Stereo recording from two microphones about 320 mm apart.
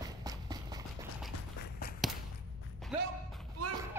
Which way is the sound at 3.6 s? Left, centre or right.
Right.